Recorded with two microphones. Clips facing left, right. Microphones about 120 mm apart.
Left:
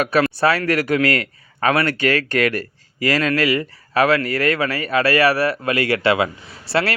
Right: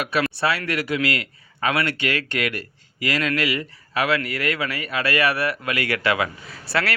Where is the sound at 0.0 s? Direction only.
40° left (ahead or behind).